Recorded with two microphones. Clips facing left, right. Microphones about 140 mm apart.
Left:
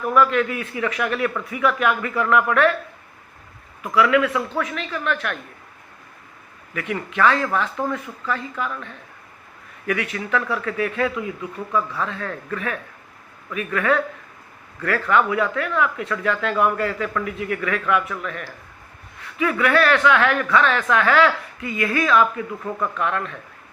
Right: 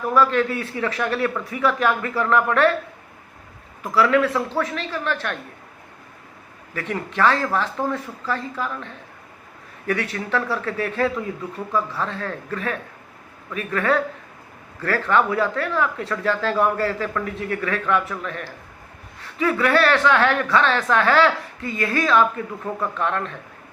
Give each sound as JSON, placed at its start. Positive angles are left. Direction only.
{"t": 0.1, "sound": "speech", "side_deg": -30}
{"t": 3.9, "sound": "speech", "side_deg": -35}
{"t": 6.7, "sound": "speech", "side_deg": -35}